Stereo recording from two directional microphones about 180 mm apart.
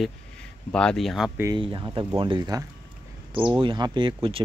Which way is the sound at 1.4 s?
25° right (ahead or behind).